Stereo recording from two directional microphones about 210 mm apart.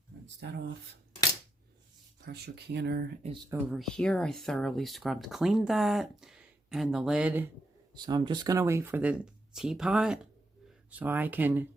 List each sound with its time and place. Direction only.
2.2 s speech: 50° right (ahead or behind)
3.5 s speech: centre (ahead or behind)
7.9 s speech: 20° right (ahead or behind)